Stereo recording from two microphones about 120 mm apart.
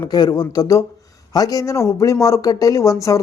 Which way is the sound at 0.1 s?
35° left (ahead or behind).